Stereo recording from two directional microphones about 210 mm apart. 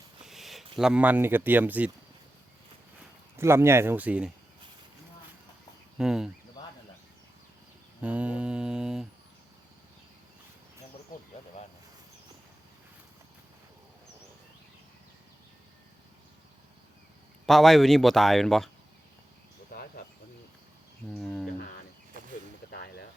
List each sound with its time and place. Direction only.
0.3 s a sound: centre (ahead or behind)
0.8 s speech: 5° right (ahead or behind)
3.3 s speech: 10° right (ahead or behind)
6.0 s speech: 5° right (ahead or behind)
8.0 s humming: 5° right (ahead or behind)
17.4 s speech: centre (ahead or behind)
21.1 s speech: centre (ahead or behind)
22.7 s a sound: 50° left (ahead or behind)